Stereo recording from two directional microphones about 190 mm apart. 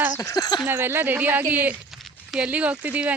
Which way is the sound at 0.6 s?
10° right (ahead or behind).